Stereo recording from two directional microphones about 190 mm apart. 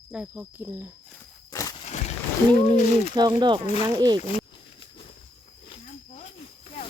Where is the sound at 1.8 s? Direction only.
35° left (ahead or behind).